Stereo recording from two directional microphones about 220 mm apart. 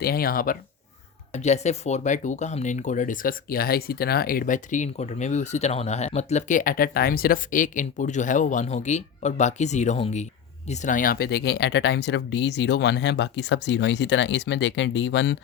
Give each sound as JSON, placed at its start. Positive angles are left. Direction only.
{"t": 0.0, "sound": "speech", "side_deg": 45}